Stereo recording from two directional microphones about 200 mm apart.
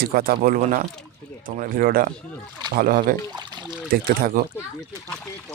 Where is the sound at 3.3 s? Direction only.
20° right (ahead or behind).